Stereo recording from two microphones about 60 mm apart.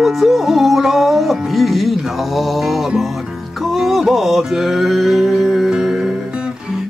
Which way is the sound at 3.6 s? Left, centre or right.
Centre.